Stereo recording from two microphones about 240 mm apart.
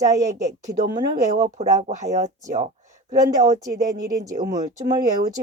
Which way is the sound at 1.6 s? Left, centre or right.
Right.